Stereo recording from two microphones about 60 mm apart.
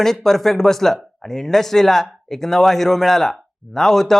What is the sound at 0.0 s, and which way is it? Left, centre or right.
Speech, centre.